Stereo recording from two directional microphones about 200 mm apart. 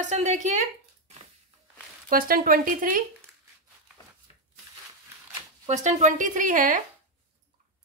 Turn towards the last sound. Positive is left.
turn(degrees=-40)  # may be behind; listen again after turning